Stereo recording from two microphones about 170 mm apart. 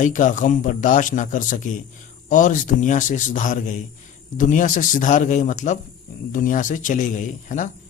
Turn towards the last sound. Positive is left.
turn(degrees=45)  # may be behind; listen again after turning